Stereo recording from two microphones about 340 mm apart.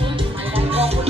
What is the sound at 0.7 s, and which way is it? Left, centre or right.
Music, centre.